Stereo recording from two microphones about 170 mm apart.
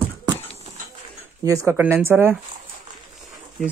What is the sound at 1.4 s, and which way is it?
Speech, 20° right (ahead or behind).